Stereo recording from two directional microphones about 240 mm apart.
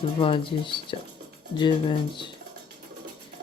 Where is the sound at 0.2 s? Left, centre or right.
Left.